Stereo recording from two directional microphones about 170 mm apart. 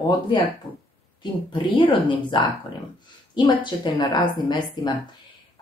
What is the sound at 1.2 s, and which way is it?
A woman's voice, 30° left (ahead or behind).